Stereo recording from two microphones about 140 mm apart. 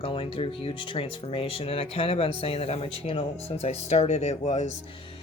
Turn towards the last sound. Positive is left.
turn(degrees=55)  # may be behind; listen again after turning